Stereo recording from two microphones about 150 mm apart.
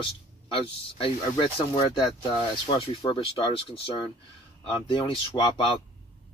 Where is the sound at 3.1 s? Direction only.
35° left (ahead or behind).